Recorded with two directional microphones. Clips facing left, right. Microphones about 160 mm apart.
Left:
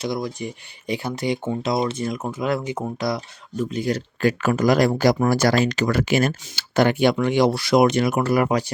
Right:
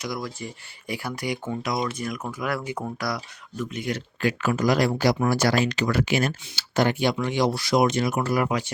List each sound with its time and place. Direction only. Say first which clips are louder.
0.0 s speech: left 5 dB; 25° left (ahead or behind)
3.6 s speech: left 6 dB; 35° left (ahead or behind); by 8.4 s 60° left (ahead or behind)
8.4 s speech: left 5 dB; 40° left (ahead or behind)